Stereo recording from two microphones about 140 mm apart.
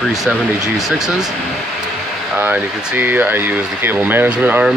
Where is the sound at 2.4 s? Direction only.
15° right (ahead or behind).